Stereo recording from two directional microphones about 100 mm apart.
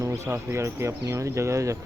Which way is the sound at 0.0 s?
30° right (ahead or behind).